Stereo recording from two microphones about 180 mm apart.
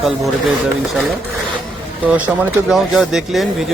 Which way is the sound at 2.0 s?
5° right (ahead or behind).